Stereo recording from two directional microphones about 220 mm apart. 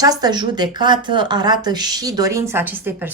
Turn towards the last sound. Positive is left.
turn(degrees=-10)  # may be behind; listen again after turning